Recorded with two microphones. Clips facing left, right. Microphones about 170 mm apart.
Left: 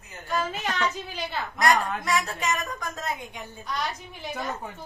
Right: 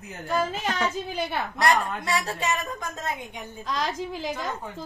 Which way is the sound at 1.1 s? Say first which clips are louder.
Right 4 dB; 65° right (ahead or behind).